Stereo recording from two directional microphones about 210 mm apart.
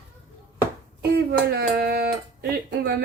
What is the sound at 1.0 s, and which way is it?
Speech, 50° right (ahead or behind).